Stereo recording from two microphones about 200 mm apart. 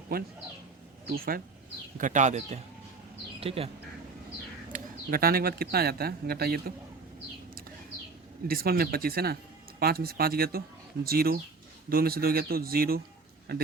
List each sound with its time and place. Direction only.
1.1 s speech: 50° right (ahead or behind); by 3.7 s 30° right (ahead or behind)
4.7 s speech: 45° right (ahead or behind)
8.4 s speech: 50° right (ahead or behind)